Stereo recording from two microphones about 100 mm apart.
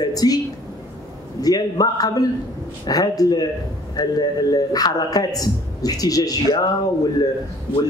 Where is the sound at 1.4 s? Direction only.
40° left (ahead or behind).